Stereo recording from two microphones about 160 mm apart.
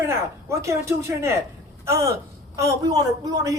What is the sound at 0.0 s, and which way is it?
A man's voice, 15° right (ahead or behind).